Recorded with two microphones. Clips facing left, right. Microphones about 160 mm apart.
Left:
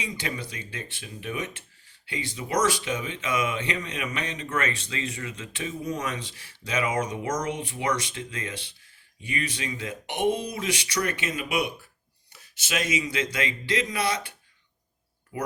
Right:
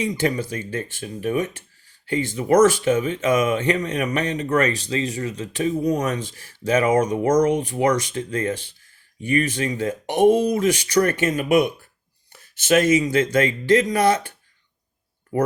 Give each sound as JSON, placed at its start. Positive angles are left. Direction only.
{"t": 0.0, "sound": "speech", "side_deg": -45}